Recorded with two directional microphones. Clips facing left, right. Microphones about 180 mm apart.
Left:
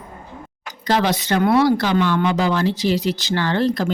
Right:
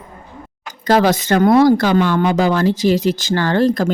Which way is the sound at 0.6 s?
45° right (ahead or behind).